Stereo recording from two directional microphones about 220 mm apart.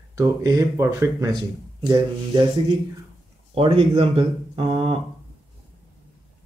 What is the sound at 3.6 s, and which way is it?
Speech, 25° right (ahead or behind).